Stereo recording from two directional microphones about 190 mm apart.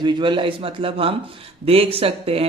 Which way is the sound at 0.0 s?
25° right (ahead or behind).